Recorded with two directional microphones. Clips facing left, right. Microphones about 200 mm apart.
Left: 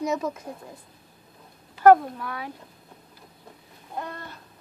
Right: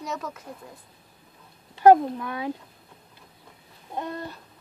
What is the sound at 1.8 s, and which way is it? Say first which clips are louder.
Speech: even; 20° right (ahead or behind).